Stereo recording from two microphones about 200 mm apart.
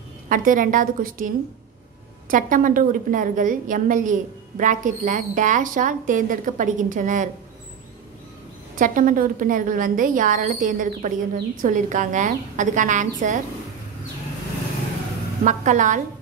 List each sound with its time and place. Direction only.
0.3 s a woman's voice: 40° right (ahead or behind)
2.3 s a woman's voice: 40° right (ahead or behind)
8.7 s a woman's voice: 40° right (ahead or behind)
15.4 s a woman's voice: 40° right (ahead or behind)